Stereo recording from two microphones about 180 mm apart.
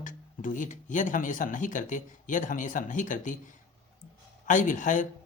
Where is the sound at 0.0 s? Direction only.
45° left (ahead or behind).